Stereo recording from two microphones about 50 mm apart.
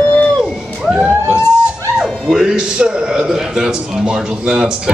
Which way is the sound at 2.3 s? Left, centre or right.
Centre.